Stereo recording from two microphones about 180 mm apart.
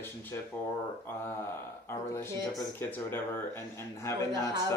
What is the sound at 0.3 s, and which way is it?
Speech, 15° left (ahead or behind).